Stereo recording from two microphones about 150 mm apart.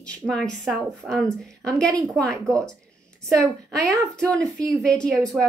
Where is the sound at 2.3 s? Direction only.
20° right (ahead or behind).